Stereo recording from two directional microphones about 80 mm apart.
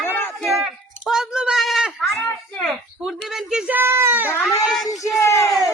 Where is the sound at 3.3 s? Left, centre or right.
Centre.